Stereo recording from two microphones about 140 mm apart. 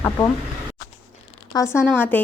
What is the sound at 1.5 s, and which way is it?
Speech, 20° left (ahead or behind).